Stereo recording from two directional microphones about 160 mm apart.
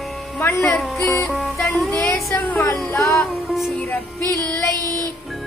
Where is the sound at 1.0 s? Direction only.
15° left (ahead or behind).